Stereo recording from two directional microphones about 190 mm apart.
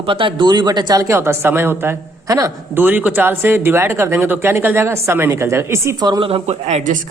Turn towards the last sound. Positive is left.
turn(degrees=-40)  # may be behind; listen again after turning